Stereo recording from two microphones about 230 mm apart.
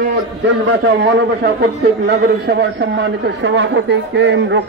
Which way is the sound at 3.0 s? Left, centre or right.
Right.